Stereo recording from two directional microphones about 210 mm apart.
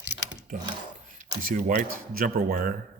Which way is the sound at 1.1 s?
35° right (ahead or behind).